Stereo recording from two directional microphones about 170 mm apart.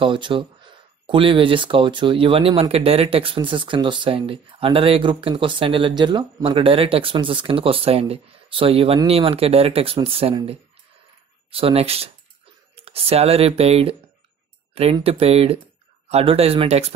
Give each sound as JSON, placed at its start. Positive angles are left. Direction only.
{"t": 0.0, "sound": "speech", "side_deg": -30}
{"t": 14.7, "sound": "a sound", "side_deg": -35}
{"t": 15.0, "sound": "speech", "side_deg": -35}